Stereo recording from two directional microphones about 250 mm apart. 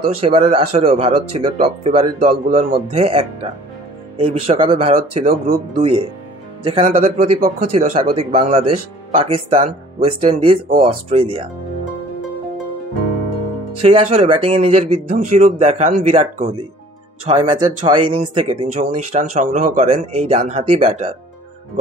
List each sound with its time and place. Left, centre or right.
0.0 s speech: right
13.7 s speech: right